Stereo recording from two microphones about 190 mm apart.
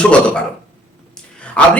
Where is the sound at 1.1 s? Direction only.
5° left (ahead or behind).